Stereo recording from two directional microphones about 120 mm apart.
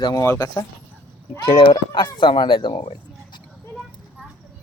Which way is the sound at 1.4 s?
45° left (ahead or behind).